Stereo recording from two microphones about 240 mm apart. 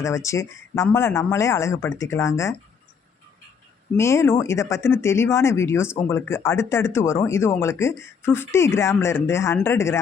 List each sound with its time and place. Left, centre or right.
0.0 s speech: centre
3.9 s speech: centre